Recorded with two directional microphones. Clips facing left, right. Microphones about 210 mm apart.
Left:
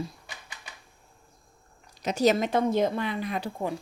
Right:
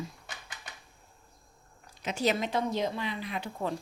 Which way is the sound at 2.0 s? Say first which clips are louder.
Left 6 dB; 40° left (ahead or behind).